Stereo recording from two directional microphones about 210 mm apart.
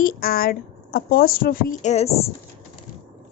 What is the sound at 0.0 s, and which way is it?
Speech, 45° left (ahead or behind).